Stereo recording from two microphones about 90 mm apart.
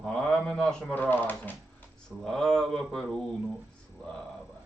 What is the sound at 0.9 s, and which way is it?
Speech, 20° left (ahead or behind).